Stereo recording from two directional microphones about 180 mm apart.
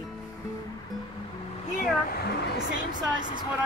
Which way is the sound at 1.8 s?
55° left (ahead or behind).